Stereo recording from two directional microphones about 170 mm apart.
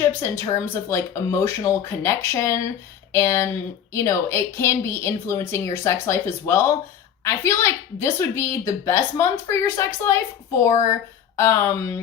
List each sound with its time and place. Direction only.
0.0 s a woman's voice: 15° left (ahead or behind)